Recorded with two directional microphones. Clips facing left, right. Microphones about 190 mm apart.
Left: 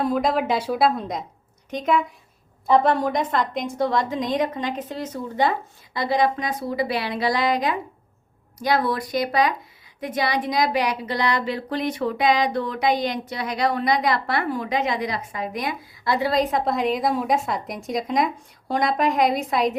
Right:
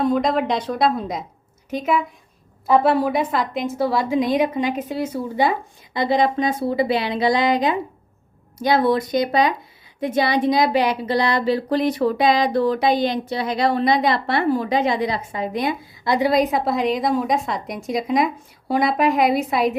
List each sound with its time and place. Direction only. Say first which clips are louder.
0.0 s a woman's voice: right 3 dB; centre (ahead or behind)
5.9 s a woman's voice: right 3 dB; 25° right (ahead or behind); by 19.7 s 5° right (ahead or behind)